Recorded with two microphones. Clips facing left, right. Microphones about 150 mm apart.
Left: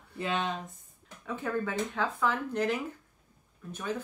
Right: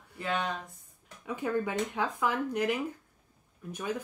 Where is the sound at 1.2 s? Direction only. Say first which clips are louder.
Right 1 dB; 15° right (ahead or behind).